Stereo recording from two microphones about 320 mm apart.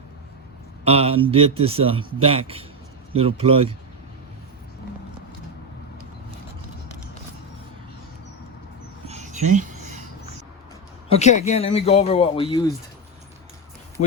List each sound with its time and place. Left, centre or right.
0.9 s speech: centre
9.0 s a sound: right
11.1 s speech: left